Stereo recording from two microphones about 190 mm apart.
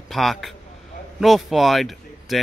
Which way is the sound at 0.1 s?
Centre (ahead or behind).